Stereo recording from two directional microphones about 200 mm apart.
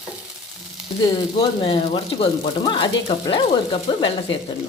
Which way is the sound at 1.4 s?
25° left (ahead or behind).